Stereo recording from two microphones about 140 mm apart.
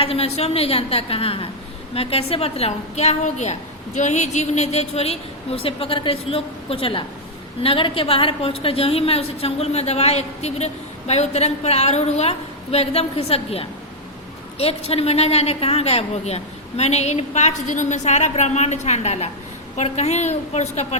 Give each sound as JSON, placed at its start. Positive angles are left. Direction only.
{"t": 0.0, "sound": "a woman's voice", "side_deg": 45}